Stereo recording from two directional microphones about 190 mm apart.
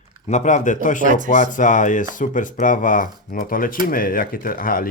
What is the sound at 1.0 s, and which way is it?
Speech, 40° right (ahead or behind).